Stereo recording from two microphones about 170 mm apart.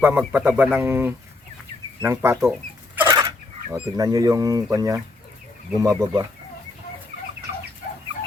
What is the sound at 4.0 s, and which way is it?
Speech, 20° right (ahead or behind).